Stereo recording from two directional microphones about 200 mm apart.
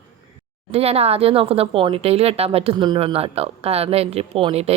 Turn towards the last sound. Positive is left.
turn(degrees=-30)  # may be behind; listen again after turning